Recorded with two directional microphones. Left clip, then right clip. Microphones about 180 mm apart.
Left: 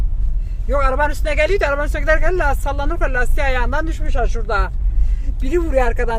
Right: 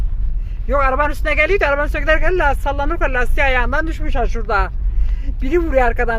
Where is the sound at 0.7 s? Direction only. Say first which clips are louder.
Right 2 dB; centre (ahead or behind).